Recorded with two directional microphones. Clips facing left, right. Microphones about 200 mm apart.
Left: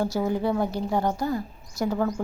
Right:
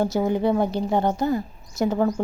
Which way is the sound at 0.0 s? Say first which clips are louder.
Right 3 dB; 20° right (ahead or behind).